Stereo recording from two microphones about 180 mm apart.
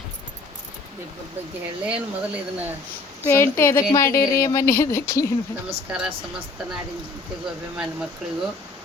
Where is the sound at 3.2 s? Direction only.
15° left (ahead or behind).